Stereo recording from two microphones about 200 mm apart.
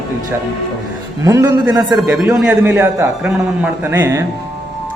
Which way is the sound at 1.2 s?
15° right (ahead or behind).